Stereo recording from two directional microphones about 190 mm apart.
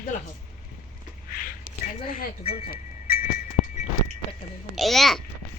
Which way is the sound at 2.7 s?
50° left (ahead or behind).